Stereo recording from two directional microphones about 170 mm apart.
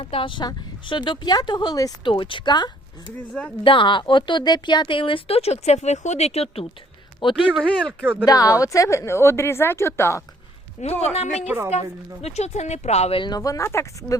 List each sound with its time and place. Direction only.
0.0 s speech: 30° left (ahead or behind)
7.5 s speech: centre (ahead or behind)
8.3 s a woman's voice: 20° left (ahead or behind)
10.8 s speech: 45° left (ahead or behind); by 14.2 s 15° left (ahead or behind)